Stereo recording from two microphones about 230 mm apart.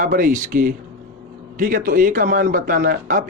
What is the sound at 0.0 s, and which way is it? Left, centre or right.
A man's voice, right.